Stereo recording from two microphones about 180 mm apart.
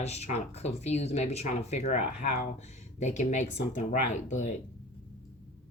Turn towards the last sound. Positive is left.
turn(degrees=40)  # may be behind; listen again after turning